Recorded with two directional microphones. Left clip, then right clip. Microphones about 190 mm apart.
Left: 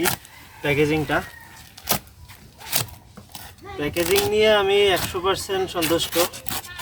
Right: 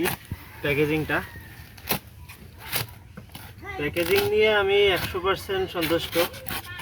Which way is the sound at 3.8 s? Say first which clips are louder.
Left 2 dB; 10° left (ahead or behind).